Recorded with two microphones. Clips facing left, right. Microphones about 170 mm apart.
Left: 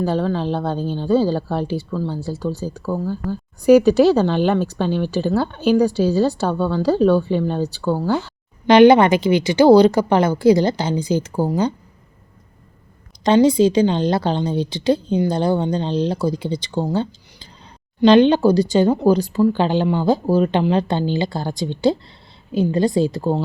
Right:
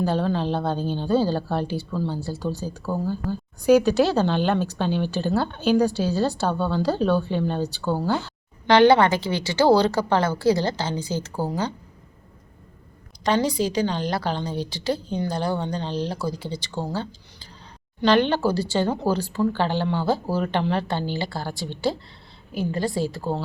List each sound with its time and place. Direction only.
0.0 s speech: 5° left (ahead or behind)
2.2 s a woman's voice: 10° left (ahead or behind)
13.2 s a woman's voice: 20° left (ahead or behind)